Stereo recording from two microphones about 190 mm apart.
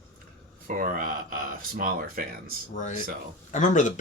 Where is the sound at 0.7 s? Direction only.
45° right (ahead or behind).